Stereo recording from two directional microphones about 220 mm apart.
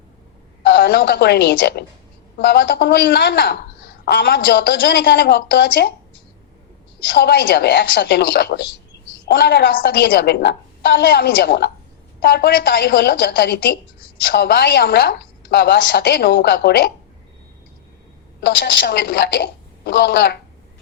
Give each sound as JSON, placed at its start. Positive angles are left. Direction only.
{"t": 0.7, "sound": "a woman's voice", "side_deg": 45}
{"t": 7.1, "sound": "a woman's voice", "side_deg": 45}
{"t": 18.3, "sound": "a woman's voice", "side_deg": 50}